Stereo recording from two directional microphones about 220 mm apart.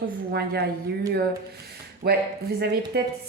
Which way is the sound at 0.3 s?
45° right (ahead or behind).